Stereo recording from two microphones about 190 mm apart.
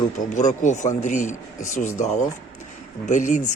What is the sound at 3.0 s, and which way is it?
Speech, 40° left (ahead or behind).